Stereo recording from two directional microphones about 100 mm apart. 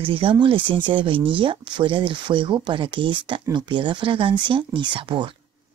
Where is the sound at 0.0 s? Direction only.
65° right (ahead or behind).